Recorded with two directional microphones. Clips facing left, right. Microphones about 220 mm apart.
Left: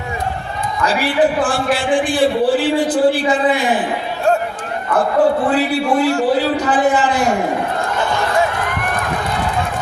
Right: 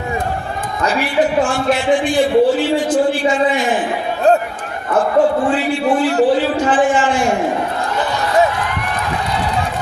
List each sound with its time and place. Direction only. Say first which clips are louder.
1.4 s a man's voice: right 2 dB; 35° left (ahead or behind)
6.7 s a man's voice: right 2 dB; 35° left (ahead or behind)